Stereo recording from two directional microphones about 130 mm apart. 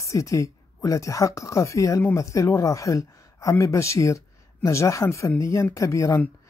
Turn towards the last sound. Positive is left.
turn(degrees=25)  # may be behind; listen again after turning